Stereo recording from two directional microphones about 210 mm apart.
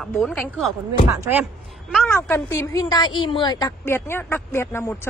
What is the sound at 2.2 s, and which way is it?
A woman's voice, 10° left (ahead or behind).